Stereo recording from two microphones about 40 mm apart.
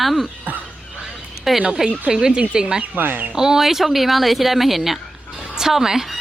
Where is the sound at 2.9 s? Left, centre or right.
Right.